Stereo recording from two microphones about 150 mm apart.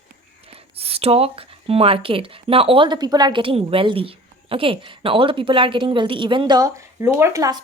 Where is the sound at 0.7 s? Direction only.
40° right (ahead or behind).